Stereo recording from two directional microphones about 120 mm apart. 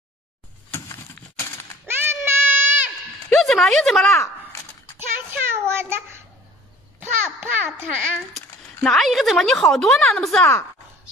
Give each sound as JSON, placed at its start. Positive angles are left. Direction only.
{"t": 0.7, "sound": "typewriter", "side_deg": 25}
{"t": 1.9, "sound": "a sound", "side_deg": -20}
{"t": 3.3, "sound": "speech", "side_deg": 5}
{"t": 4.1, "sound": "a sound", "side_deg": 20}
{"t": 4.9, "sound": "child singing", "side_deg": -20}
{"t": 7.0, "sound": "babbling", "side_deg": -20}
{"t": 8.8, "sound": "a woman's voice", "side_deg": 0}